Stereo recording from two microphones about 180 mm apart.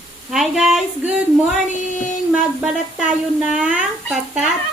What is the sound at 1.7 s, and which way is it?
Child singing, 45° left (ahead or behind).